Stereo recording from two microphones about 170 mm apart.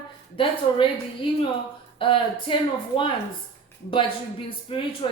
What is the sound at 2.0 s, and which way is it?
A woman's voice, 30° left (ahead or behind).